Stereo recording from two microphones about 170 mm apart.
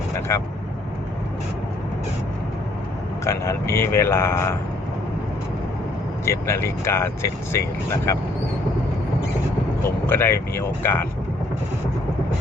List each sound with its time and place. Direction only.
0.3 s speech: 15° left (ahead or behind)
3.2 s speech: 15° left (ahead or behind)
6.2 s speech: 15° left (ahead or behind)
9.8 s speech: 15° left (ahead or behind)